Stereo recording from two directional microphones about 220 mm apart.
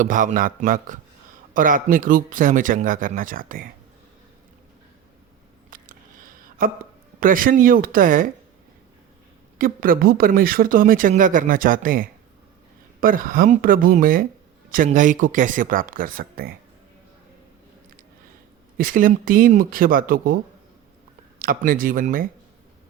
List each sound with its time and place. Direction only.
0.0 s speech: 35° right (ahead or behind)
5.7 s a sound: 40° right (ahead or behind)
7.2 s speech: 40° right (ahead or behind)
9.6 s speech: 40° right (ahead or behind)
18.8 s speech: 40° right (ahead or behind)